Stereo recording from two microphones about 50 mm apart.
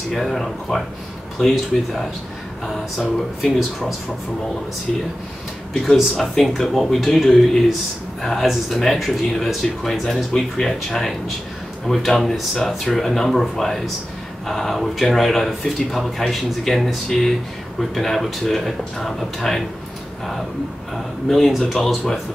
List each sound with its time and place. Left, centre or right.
0.1 s speech: centre
3.4 s speech: centre
5.7 s speech: centre
12.5 s speech: centre
20.9 s speech: centre